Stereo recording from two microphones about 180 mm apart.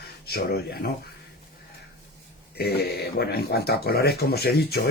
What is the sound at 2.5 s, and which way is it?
Speech, 60° left (ahead or behind).